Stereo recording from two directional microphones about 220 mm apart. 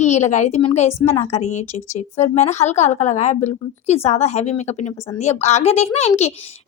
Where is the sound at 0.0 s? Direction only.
30° left (ahead or behind).